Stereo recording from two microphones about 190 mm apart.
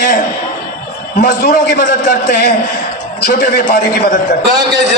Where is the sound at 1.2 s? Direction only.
50° left (ahead or behind).